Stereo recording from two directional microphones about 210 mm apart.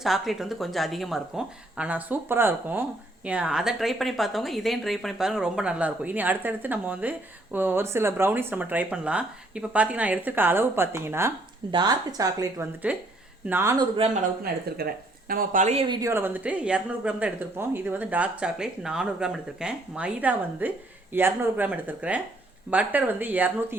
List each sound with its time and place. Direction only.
0.0 s speech: centre (ahead or behind); by 14.1 s 20° right (ahead or behind)
14.1 s speech: 45° right (ahead or behind); by 16.0 s 30° right (ahead or behind)
16.0 s speech: 10° right (ahead or behind)